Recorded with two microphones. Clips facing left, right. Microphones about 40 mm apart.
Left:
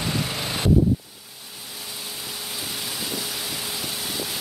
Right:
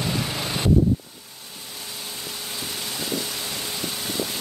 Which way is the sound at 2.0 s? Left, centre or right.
Centre.